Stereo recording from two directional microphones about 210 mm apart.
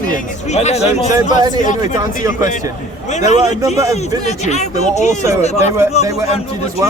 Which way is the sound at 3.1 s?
35° left (ahead or behind).